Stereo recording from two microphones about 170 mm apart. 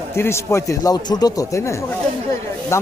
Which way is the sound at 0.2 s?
15° left (ahead or behind).